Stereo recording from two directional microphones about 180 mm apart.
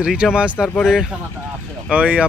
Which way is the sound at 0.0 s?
5° right (ahead or behind).